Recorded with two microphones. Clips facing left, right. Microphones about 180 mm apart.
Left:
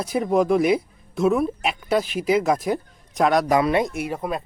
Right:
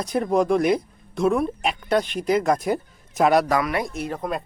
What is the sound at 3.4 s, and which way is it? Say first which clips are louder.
Speech: left 4 dB; 20° left (ahead or behind).